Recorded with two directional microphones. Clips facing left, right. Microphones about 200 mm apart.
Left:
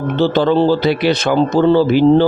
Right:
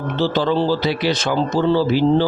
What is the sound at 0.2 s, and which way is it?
Speech, 55° left (ahead or behind).